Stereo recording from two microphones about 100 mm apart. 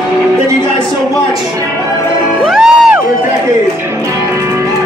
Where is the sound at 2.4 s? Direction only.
5° right (ahead or behind).